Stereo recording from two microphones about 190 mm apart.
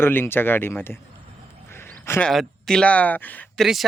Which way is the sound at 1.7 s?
10° left (ahead or behind).